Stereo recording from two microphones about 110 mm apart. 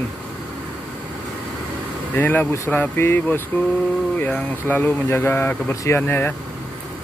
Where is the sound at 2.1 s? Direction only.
15° left (ahead or behind).